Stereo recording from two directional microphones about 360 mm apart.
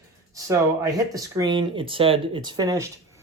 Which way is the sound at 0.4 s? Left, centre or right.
Centre.